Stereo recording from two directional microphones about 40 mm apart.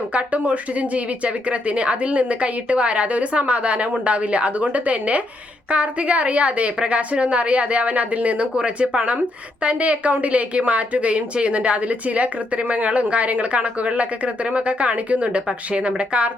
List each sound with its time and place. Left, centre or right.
0.1 s speech: right